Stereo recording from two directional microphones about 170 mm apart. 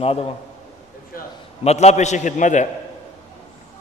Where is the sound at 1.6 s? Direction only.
40° left (ahead or behind).